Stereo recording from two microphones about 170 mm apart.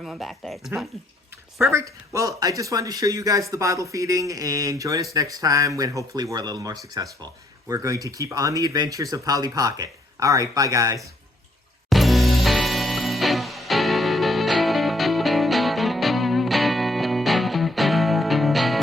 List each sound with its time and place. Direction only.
0.0 s speech: centre (ahead or behind)
1.7 s speech: 20° right (ahead or behind)
11.9 s music: centre (ahead or behind)